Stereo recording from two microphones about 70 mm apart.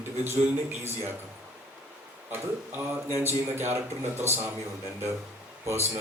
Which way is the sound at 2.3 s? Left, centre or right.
Right.